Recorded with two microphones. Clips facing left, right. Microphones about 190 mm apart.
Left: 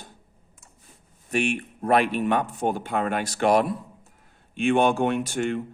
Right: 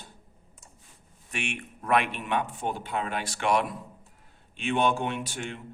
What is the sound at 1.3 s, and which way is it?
Speech, 40° left (ahead or behind).